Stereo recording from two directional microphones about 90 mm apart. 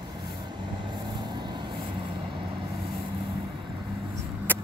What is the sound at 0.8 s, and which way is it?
Vehicle, 55° right (ahead or behind).